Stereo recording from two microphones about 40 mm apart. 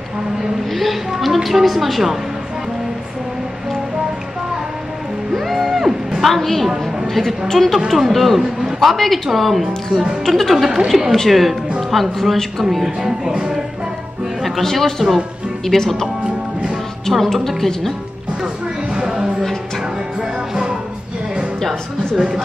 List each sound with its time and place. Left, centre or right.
0.7 s a woman's voice: centre
5.3 s music: centre
6.2 s a woman's voice: centre
8.4 s music: centre
8.7 s a woman's voice: centre
10.5 s a woman's voice: centre
12.7 s music: centre
14.6 s a woman's voice: centre
17.1 s a woman's voice: centre
18.4 s music: centre
22.1 s speech: centre